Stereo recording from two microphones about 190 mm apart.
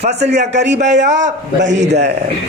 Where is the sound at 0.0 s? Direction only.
35° right (ahead or behind).